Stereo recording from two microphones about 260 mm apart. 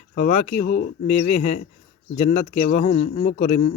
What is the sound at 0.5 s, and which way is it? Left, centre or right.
Speech, left.